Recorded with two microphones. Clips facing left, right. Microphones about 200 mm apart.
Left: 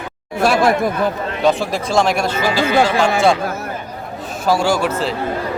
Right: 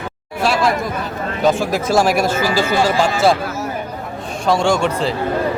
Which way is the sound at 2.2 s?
45° right (ahead or behind).